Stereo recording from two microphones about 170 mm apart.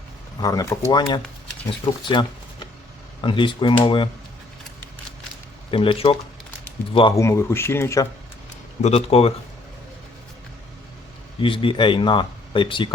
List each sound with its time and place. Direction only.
0.4 s speech: 20° left (ahead or behind)
3.2 s speech: 30° left (ahead or behind)
5.7 s speech: 30° left (ahead or behind)
7.2 s speech: 15° left (ahead or behind)
8.8 s speech: 35° left (ahead or behind)
11.3 s speech: 30° left (ahead or behind)